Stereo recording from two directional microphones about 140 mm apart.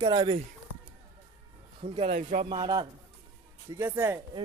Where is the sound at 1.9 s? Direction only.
45° right (ahead or behind).